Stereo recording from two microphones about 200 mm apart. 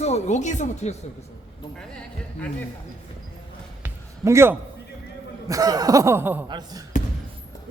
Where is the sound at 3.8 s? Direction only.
15° right (ahead or behind).